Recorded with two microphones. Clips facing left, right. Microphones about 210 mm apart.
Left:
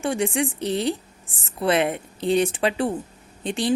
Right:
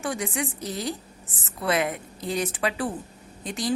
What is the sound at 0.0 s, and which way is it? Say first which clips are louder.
A woman's voice: left 6 dB; 30° left (ahead or behind).